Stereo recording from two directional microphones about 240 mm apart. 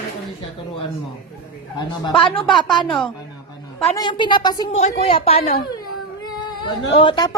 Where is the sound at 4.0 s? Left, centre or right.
Centre.